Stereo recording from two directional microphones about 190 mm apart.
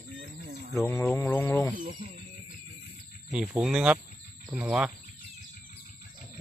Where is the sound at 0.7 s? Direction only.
15° left (ahead or behind).